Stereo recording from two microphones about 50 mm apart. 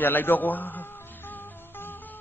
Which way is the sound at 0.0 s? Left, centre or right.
Left.